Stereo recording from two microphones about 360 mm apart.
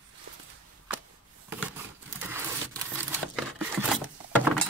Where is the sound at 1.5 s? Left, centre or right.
Centre.